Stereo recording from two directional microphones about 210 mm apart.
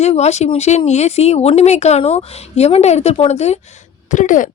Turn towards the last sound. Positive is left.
turn(degrees=35)  # may be behind; listen again after turning